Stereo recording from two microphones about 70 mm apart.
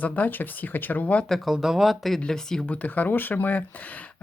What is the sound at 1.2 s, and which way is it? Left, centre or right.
Speech, centre.